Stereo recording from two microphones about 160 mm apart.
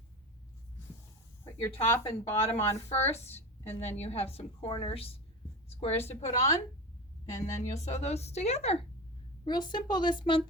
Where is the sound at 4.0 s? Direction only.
40° left (ahead or behind).